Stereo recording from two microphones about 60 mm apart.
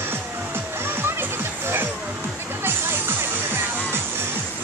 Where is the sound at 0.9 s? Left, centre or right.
Right.